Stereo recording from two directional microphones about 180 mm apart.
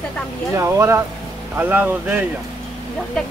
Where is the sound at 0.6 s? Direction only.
15° right (ahead or behind).